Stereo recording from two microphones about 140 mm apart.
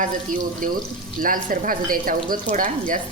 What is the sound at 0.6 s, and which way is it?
Speech, 80° right.